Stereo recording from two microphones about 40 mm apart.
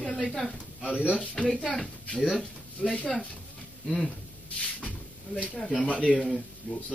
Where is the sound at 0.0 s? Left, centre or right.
Centre.